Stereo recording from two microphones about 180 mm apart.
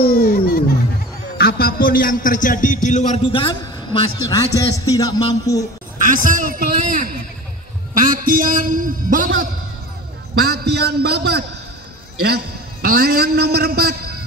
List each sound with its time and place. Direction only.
0.0 s a sound: 55° left (ahead or behind)
1.4 s a man's voice: 55° left (ahead or behind); by 4.1 s 30° left (ahead or behind)
4.3 s a man's voice: 20° left (ahead or behind)
6.0 s a man's voice: 45° right (ahead or behind)
10.4 s a man's voice: 65° right (ahead or behind)